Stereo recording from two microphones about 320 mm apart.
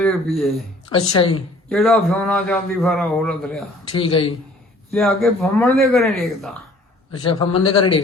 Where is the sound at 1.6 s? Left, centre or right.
Centre.